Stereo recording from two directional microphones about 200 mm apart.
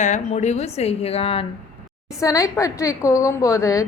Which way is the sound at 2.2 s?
15° left (ahead or behind).